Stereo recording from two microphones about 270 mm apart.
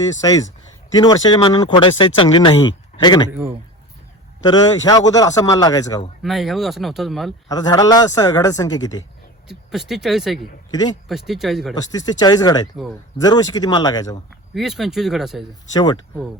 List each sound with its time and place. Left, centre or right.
0.2 s speech: centre
4.4 s speech: centre
6.2 s speech: centre
7.4 s speech: centre
9.5 s speech: centre
10.7 s speech: centre
11.1 s speech: centre
11.7 s speech: centre
14.5 s speech: centre